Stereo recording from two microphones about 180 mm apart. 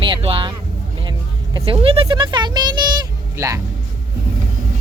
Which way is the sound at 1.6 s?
30° right (ahead or behind).